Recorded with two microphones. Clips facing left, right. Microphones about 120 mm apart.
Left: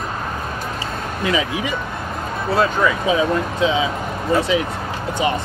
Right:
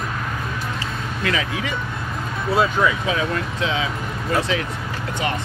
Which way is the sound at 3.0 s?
20° left (ahead or behind).